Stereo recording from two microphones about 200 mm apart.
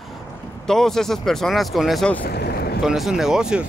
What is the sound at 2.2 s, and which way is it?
Speech, 50° left (ahead or behind).